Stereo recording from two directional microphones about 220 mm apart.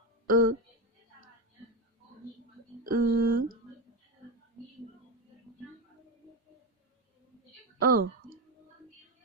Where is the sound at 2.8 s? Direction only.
40° right (ahead or behind).